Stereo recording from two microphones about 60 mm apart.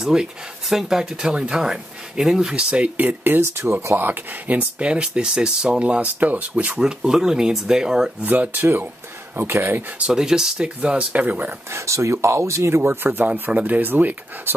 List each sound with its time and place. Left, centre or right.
0.0 s speech: centre
3.0 s speech: right; by 8.1 s centre
8.2 s speech: right
9.4 s speech: right
9.9 s speech: centre
11.7 s speech: right
13.2 s speech: right